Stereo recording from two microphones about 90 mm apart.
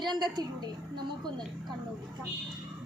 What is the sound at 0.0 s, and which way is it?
Speech, 55° right (ahead or behind).